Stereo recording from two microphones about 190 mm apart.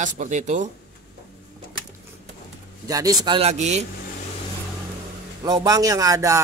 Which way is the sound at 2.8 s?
20° right (ahead or behind).